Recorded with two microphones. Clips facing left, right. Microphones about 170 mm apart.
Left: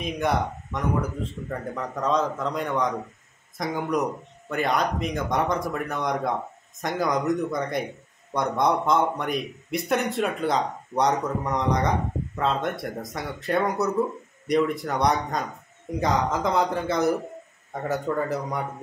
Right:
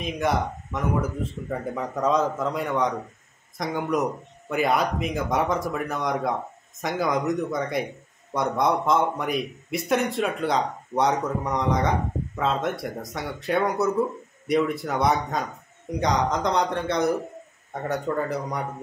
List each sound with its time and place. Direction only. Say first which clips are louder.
0.0 s a man's voice: even; centre (ahead or behind)